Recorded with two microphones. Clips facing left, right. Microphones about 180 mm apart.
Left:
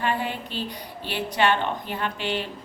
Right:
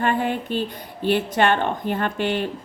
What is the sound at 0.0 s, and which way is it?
A woman's voice, 50° right (ahead or behind).